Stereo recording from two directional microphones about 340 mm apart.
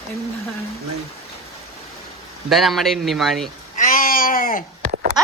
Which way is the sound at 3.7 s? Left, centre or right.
Left.